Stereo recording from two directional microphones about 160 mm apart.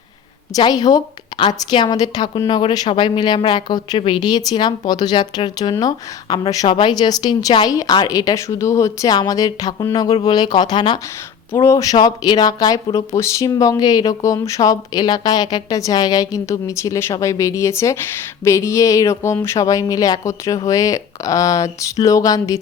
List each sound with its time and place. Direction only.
0.5 s a woman's voice: 25° left (ahead or behind)